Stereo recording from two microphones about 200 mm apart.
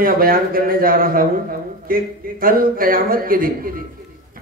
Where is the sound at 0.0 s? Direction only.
45° right (ahead or behind).